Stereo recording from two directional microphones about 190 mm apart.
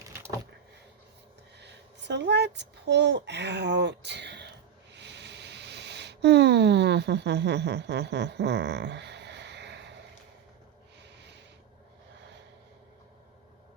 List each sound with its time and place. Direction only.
0.1 s vehicle: 10° right (ahead or behind)
1.5 s a child's voice: 65° right (ahead or behind)
4.9 s a sound: 65° right (ahead or behind)